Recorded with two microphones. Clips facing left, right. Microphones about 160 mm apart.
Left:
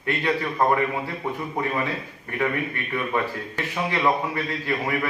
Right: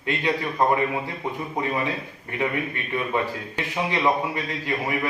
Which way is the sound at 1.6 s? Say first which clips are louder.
Right 1 dB; 15° right (ahead or behind).